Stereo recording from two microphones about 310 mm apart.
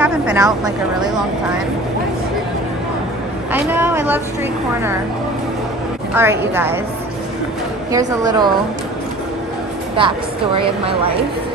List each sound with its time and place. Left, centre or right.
0.0 s speech: centre
3.5 s a woman's voice: centre
6.1 s a woman's voice: centre
7.9 s a woman's voice: centre
9.9 s a woman's voice: centre